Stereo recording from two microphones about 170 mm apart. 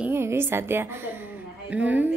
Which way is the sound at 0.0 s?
15° right (ahead or behind).